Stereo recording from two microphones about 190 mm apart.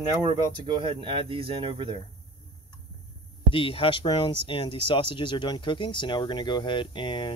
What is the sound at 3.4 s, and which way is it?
Speech, 30° left (ahead or behind).